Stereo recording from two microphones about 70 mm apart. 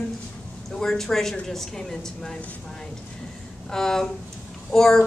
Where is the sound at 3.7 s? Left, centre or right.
Centre.